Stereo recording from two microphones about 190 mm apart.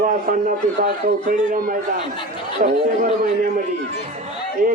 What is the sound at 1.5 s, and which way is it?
Speech, 45° right (ahead or behind).